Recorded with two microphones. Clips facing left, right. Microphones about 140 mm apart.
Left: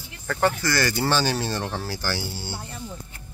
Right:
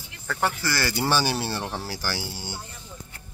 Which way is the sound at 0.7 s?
10° right (ahead or behind).